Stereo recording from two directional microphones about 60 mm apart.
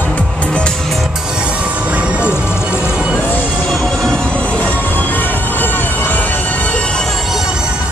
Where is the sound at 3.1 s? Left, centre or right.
Left.